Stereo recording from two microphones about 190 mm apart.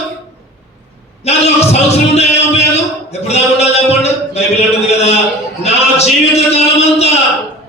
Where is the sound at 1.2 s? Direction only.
35° left (ahead or behind).